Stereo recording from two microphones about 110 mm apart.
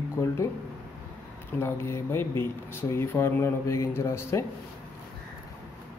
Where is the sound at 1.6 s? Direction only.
25° left (ahead or behind).